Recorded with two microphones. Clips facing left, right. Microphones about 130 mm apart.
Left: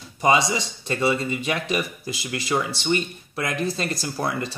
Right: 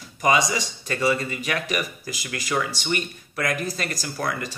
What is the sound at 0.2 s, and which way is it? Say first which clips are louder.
Speech: left 1 dB; 25° left (ahead or behind).